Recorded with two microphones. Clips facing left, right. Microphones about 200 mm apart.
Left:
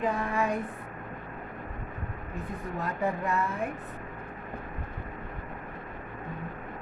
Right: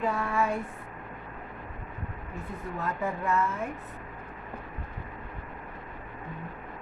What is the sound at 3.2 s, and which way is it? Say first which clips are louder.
Speech: right 2 dB; 35° left (ahead or behind).